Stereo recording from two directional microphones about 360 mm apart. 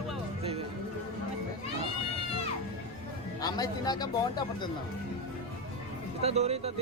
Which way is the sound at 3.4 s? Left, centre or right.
Centre.